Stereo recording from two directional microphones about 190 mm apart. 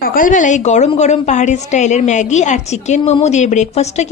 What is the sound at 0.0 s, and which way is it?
A woman's voice, 45° left (ahead or behind).